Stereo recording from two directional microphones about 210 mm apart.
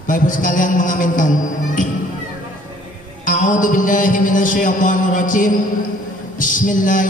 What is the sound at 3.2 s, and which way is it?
Music, 40° left (ahead or behind).